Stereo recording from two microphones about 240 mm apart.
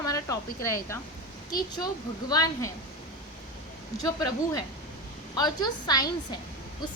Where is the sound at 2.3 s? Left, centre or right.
Centre.